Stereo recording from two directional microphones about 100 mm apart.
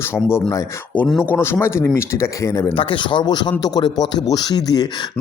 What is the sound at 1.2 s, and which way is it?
Speech, 20° left (ahead or behind).